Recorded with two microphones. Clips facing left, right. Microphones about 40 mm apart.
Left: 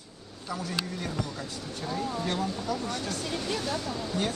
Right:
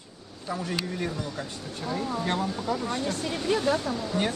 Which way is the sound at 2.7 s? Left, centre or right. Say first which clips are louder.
Right 3 dB; right.